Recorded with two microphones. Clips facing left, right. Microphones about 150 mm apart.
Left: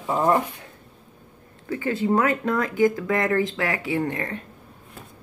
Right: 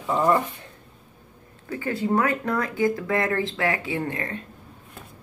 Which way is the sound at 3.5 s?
20° right (ahead or behind).